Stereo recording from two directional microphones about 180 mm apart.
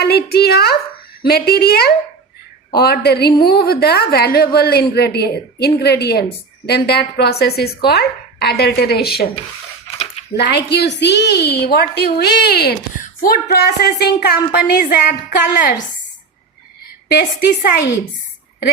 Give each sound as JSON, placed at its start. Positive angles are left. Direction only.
{"t": 0.0, "sound": "a woman's voice", "side_deg": 65}
{"t": 10.3, "sound": "a woman's voice", "side_deg": 65}
{"t": 17.1, "sound": "a woman's voice", "side_deg": 55}